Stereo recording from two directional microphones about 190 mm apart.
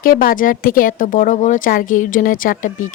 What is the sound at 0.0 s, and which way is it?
Speech, 50° left (ahead or behind).